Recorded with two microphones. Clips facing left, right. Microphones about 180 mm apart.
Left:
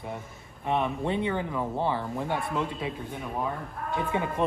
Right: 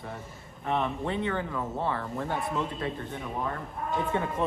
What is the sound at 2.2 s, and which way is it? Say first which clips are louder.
Speech: left 1 dB; centre (ahead or behind).